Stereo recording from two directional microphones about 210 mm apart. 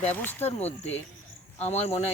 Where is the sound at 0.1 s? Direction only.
10° left (ahead or behind).